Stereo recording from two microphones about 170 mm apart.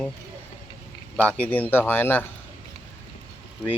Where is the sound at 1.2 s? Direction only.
10° left (ahead or behind).